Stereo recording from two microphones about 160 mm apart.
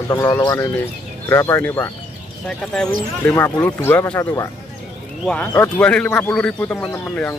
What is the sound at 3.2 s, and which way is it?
Speech, 15° left (ahead or behind).